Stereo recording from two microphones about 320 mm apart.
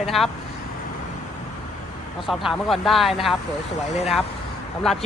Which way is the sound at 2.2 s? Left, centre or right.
Centre.